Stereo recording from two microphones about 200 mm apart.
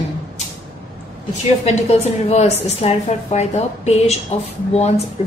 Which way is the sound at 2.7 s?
30° left (ahead or behind).